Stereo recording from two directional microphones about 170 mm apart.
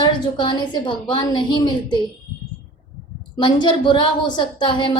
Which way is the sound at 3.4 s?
25° left (ahead or behind).